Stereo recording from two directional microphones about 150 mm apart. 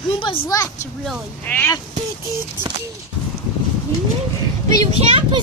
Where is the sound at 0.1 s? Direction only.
35° left (ahead or behind).